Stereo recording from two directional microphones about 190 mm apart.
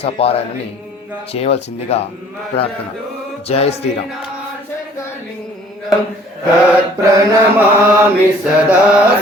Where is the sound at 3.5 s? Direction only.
30° left (ahead or behind).